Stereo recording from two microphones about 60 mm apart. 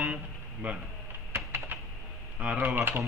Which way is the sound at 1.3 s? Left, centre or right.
Right.